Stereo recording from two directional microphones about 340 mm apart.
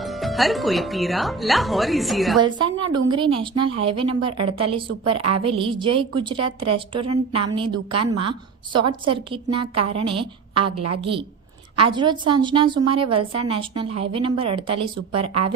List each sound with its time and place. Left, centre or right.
0.0 s speech: centre
2.4 s a woman's voice: centre
10.7 s a woman's voice: right
11.8 s a woman's voice: centre